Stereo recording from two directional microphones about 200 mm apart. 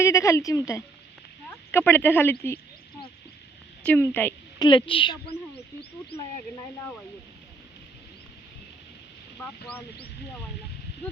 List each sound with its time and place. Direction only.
0.0 s a woman's voice: 15° left (ahead or behind)
3.8 s a woman's voice: 10° left (ahead or behind)
4.6 s a woman's voice: 25° left (ahead or behind)
9.4 s a woman's voice: 10° left (ahead or behind)